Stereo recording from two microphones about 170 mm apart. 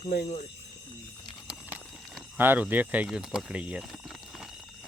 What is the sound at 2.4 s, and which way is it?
Speech, 10° right (ahead or behind).